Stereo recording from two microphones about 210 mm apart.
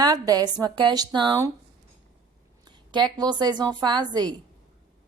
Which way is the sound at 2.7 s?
20° right (ahead or behind).